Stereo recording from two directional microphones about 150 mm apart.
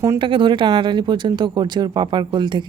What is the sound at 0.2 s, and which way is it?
Speech, 30° right (ahead or behind).